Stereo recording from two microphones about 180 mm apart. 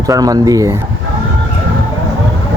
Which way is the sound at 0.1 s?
20° right (ahead or behind).